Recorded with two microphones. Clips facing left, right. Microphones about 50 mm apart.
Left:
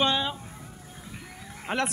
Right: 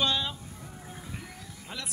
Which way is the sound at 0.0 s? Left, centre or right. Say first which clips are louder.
Left 4 dB; left.